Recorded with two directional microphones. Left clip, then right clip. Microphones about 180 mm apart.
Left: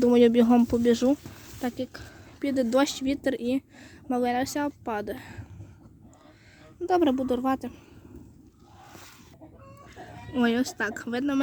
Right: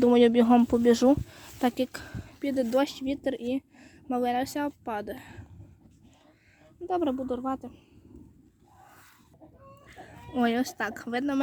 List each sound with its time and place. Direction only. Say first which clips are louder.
0.0 s speech: left 1 dB; 5° right (ahead or behind); by 1.2 s 20° right (ahead or behind)
1.6 s speech: right 5 dB; 40° right (ahead or behind)
2.4 s a woman's voice: left 2 dB; 10° right (ahead or behind)
6.8 s speech: left 5 dB; 10° left (ahead or behind)
9.9 s speech: left 1 dB; 20° right (ahead or behind)